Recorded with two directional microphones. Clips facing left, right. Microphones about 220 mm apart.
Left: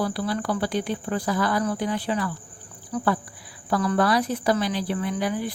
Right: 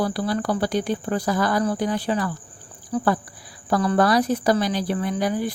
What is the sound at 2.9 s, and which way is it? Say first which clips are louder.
Speech: right 3 dB; 30° right (ahead or behind).